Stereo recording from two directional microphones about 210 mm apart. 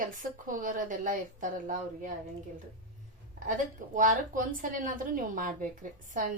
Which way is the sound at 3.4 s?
40° right (ahead or behind).